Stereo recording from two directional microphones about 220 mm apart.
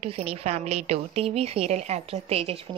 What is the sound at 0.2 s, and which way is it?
A woman's voice, 30° right (ahead or behind).